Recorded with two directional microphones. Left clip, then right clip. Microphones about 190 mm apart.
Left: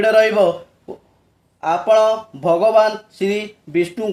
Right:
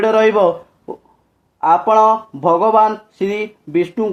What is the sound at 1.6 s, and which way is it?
Speech, 30° right (ahead or behind).